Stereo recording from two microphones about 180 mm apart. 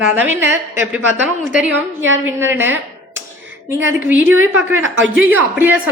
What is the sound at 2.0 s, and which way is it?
Speech, 90° right.